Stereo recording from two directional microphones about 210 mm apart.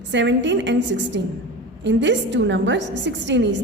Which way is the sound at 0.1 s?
60° right (ahead or behind).